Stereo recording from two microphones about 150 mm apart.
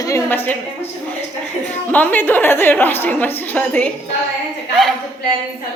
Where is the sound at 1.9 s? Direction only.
10° left (ahead or behind).